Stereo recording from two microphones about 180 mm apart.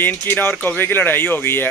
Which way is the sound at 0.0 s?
10° left (ahead or behind).